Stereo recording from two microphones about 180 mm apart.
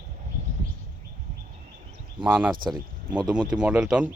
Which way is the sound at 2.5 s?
25° right (ahead or behind).